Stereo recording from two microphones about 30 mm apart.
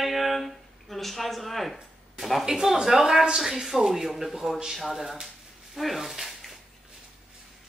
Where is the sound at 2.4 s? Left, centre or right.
Centre.